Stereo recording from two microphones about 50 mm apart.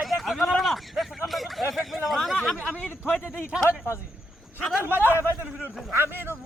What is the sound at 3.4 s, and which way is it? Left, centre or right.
Speech, centre.